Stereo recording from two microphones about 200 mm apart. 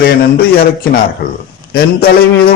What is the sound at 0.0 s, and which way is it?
A man's voice, 50° left (ahead or behind).